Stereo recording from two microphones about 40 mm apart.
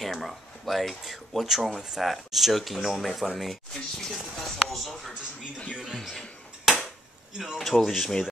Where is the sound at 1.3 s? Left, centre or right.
Centre.